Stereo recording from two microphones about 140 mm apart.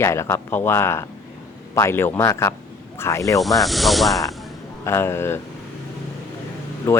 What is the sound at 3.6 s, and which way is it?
Speech, centre (ahead or behind).